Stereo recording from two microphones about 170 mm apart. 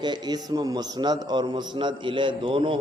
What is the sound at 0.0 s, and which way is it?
A man's voice, 25° right (ahead or behind).